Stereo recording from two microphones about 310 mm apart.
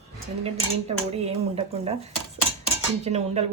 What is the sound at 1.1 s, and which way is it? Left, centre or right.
Speech, centre.